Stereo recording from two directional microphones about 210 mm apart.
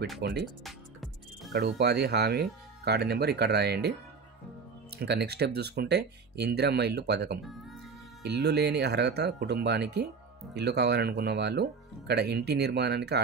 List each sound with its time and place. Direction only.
0.2 s speech: 50° right (ahead or behind)
0.7 s music: centre (ahead or behind)
1.5 s speech: 50° right (ahead or behind)
4.9 s speech: 50° right (ahead or behind)